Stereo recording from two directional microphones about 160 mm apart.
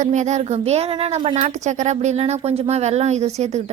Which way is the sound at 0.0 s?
50° right (ahead or behind).